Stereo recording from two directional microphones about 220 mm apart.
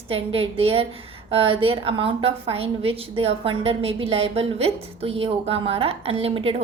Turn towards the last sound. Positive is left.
turn(degrees=-25)  # may be behind; listen again after turning